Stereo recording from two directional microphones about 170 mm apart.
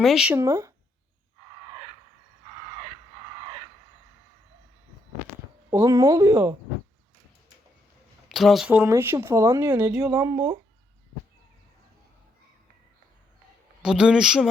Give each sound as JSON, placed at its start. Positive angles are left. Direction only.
{"t": 0.0, "sound": "speech", "side_deg": -5}
{"t": 0.3, "sound": "speech", "side_deg": -20}
{"t": 5.7, "sound": "speech", "side_deg": -20}
{"t": 8.3, "sound": "speech", "side_deg": 0}
{"t": 10.1, "sound": "speech", "side_deg": -20}
{"t": 13.8, "sound": "speech", "side_deg": -5}